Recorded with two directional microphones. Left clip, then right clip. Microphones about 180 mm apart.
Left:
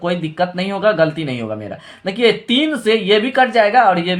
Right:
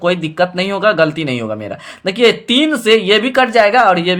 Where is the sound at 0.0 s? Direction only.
30° right (ahead or behind).